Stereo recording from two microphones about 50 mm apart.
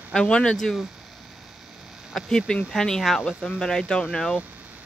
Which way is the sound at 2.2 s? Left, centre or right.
Centre.